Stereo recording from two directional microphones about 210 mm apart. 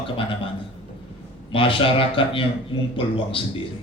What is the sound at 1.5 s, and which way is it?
A man's voice, 25° left (ahead or behind).